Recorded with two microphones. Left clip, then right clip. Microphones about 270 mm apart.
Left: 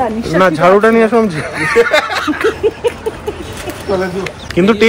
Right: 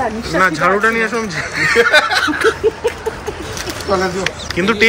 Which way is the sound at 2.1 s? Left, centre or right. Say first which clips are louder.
Right 1 dB; left.